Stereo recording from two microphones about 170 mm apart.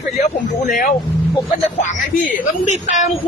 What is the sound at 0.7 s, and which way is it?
A man's voice, 55° left (ahead or behind).